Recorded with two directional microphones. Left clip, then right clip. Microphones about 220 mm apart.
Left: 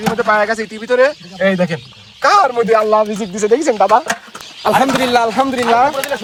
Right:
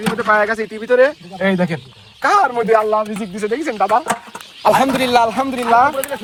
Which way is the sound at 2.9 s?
15° left (ahead or behind).